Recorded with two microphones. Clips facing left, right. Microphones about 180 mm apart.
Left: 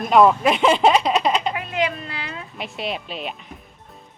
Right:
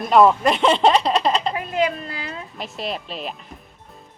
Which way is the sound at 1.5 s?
40° right (ahead or behind).